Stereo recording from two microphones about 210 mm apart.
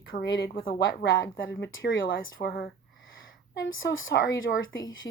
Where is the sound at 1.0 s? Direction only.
65° left (ahead or behind).